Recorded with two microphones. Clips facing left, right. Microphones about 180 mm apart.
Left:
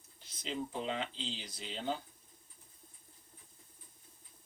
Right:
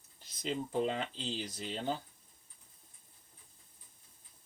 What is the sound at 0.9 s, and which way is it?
Speech, 45° right (ahead or behind).